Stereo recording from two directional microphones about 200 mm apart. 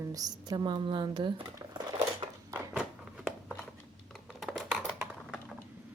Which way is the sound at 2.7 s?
5° right (ahead or behind).